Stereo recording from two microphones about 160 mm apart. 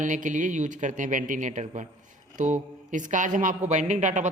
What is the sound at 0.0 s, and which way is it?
Speech, 50° right (ahead or behind).